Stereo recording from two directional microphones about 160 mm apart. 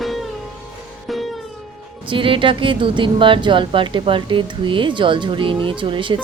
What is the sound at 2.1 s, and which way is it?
Speech, 30° right (ahead or behind).